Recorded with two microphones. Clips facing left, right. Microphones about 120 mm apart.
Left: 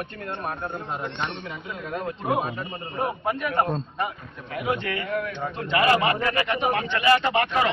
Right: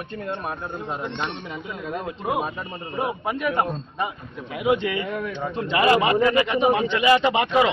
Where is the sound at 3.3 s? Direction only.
10° right (ahead or behind).